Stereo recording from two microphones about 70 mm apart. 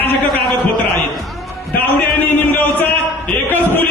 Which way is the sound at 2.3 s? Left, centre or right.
Left.